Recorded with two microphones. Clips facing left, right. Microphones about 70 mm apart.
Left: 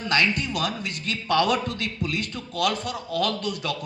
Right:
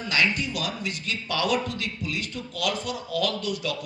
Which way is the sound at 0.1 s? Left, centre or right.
Left.